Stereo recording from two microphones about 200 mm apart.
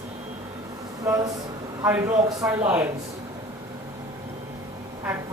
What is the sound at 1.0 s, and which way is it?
A man's voice, 15° right (ahead or behind).